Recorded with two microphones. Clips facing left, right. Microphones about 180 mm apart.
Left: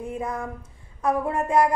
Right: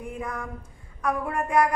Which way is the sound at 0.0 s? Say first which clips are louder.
Left 4 dB; 25° left (ahead or behind).